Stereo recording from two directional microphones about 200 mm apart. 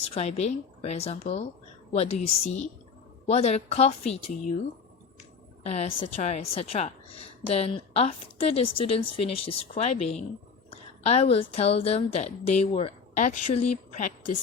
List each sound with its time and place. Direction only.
0.0 s speech: 30° left (ahead or behind)
3.2 s speech: 30° left (ahead or behind)
5.6 s a woman's voice: 35° left (ahead or behind)